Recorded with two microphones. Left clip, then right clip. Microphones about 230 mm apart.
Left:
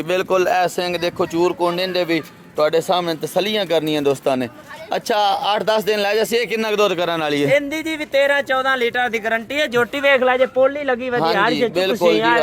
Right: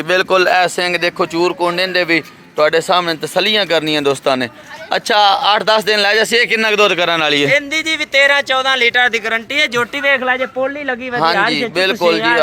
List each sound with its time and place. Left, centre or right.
0.1 s speech: centre
7.4 s speech: left
11.8 s speech: centre